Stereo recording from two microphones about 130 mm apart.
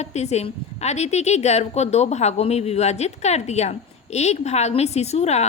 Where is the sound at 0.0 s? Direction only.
55° left (ahead or behind).